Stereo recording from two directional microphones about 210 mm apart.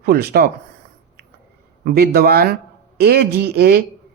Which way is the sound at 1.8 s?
45° right (ahead or behind).